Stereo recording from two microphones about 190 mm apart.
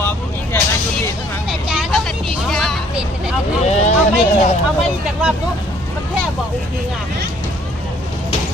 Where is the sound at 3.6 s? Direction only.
35° left (ahead or behind).